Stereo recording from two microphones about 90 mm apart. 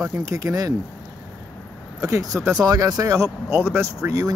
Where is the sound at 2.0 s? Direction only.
35° right (ahead or behind).